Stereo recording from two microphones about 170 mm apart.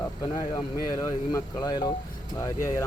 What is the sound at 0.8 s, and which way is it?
Speech, 20° left (ahead or behind).